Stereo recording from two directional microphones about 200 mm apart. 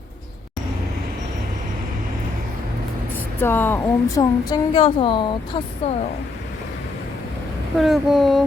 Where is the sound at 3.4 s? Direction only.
10° left (ahead or behind); by 6.0 s 30° left (ahead or behind).